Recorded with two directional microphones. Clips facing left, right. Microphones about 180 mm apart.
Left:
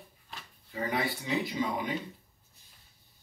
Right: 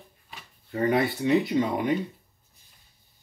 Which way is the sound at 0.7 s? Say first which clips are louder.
Right 8 dB; 60° right (ahead or behind).